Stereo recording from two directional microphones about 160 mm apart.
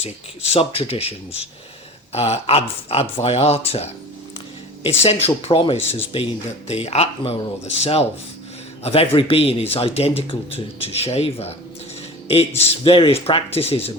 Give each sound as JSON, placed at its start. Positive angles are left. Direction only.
{"t": 0.5, "sound": "speech", "side_deg": 35}
{"t": 5.0, "sound": "a man's voice", "side_deg": 40}